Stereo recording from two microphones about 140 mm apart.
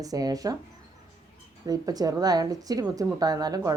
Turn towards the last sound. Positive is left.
turn(degrees=-25)  # may be behind; listen again after turning